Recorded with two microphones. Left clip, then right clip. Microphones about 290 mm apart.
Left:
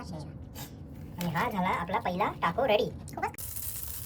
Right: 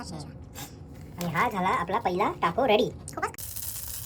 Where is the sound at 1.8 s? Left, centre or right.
Centre.